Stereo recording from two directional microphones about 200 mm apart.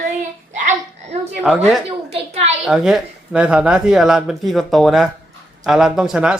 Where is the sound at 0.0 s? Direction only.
40° right (ahead or behind).